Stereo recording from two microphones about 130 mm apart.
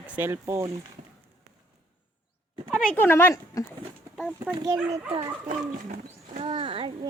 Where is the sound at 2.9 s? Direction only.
15° left (ahead or behind).